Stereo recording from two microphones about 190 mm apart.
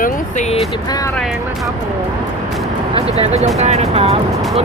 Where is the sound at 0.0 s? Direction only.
35° left (ahead or behind).